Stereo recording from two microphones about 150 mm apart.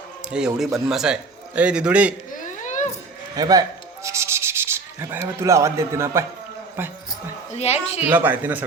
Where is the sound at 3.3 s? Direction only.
25° right (ahead or behind).